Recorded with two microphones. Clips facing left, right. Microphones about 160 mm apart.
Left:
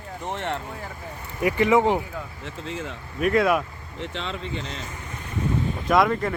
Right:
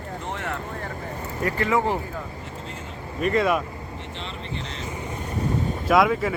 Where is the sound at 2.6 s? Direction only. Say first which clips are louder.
Left 5 dB; 90° left.